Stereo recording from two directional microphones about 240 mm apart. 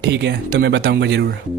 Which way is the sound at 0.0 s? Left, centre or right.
Right.